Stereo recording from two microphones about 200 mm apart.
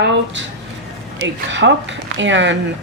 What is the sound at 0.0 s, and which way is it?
Speech, 60° right (ahead or behind).